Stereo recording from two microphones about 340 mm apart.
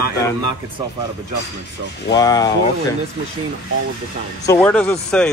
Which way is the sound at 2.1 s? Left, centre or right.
Centre.